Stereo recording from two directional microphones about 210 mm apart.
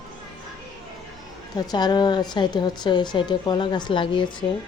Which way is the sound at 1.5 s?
20° left (ahead or behind).